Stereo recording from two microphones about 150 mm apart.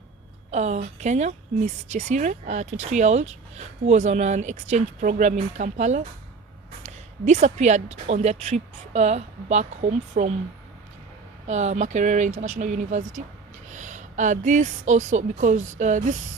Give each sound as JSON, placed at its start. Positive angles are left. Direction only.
{"t": 0.5, "sound": "a woman's voice", "side_deg": -50}
{"t": 11.4, "sound": "a woman's voice", "side_deg": -50}